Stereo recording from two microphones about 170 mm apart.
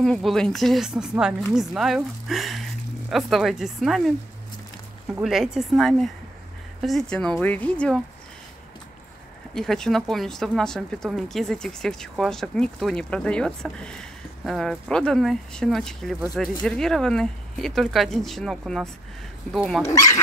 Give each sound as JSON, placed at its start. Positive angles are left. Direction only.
{"t": 0.0, "sound": "speech", "side_deg": 0}
{"t": 5.2, "sound": "speech", "side_deg": 0}
{"t": 9.5, "sound": "speech", "side_deg": 5}
{"t": 19.8, "sound": "speech", "side_deg": 20}